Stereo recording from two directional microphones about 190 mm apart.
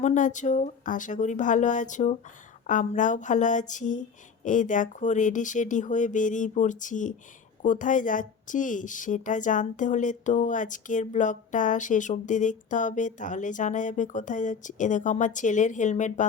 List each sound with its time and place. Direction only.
0.0 s a woman's voice: 40° left (ahead or behind)